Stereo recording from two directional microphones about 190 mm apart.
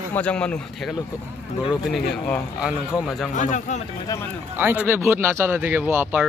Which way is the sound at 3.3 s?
40° left (ahead or behind).